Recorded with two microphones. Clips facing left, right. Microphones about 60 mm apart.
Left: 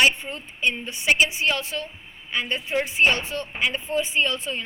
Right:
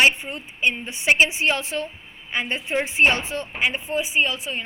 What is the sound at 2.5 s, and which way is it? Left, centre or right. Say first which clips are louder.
Speech: even; centre.